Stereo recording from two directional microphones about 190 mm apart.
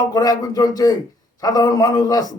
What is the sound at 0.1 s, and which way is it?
A man's voice, 20° left (ahead or behind).